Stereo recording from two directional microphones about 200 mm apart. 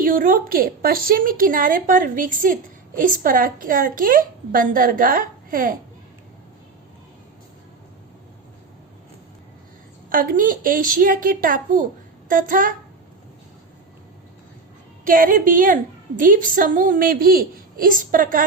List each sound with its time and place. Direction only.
0.0 s a woman's voice: 45° right (ahead or behind)
10.1 s a woman's voice: 45° right (ahead or behind)
15.0 s a woman's voice: 45° right (ahead or behind)